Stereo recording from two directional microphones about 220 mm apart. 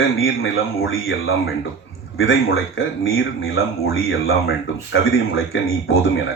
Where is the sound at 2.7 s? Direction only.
65° left (ahead or behind).